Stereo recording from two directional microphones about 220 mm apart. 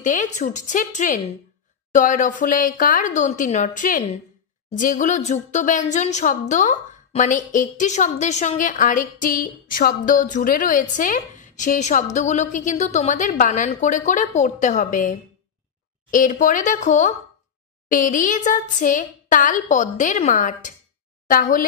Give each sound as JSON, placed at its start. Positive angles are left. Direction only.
{"t": 0.0, "sound": "a woman's voice", "side_deg": 35}